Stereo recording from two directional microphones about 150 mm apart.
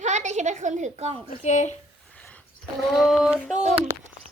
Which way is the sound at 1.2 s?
55° left (ahead or behind).